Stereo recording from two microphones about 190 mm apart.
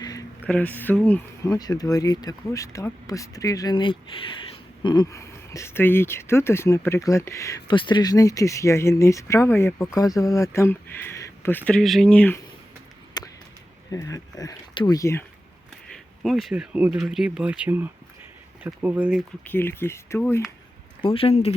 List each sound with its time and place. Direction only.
0.0 s a sound: 20° left (ahead or behind)
0.4 s speech: 5° left (ahead or behind)
1.5 s speech: 20° left (ahead or behind)
13.2 s a sound: 20° left (ahead or behind)
13.9 s speech: 20° left (ahead or behind)
15.9 s speech: centre (ahead or behind)
19.5 s speech: 10° left (ahead or behind)
21.0 s speech: 30° left (ahead or behind)